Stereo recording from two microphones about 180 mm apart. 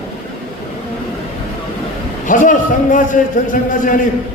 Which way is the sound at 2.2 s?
45° left (ahead or behind).